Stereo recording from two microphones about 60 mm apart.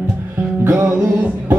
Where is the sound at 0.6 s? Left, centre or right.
Right.